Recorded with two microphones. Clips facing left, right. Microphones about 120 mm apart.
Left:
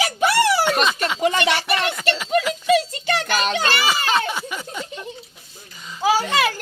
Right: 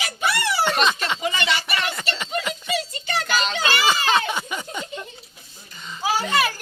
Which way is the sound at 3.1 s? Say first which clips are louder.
Left 3 dB; 55° left (ahead or behind).